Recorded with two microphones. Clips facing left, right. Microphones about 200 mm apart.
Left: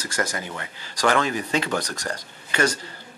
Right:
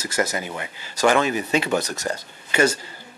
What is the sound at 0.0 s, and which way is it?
Speech, 10° right (ahead or behind).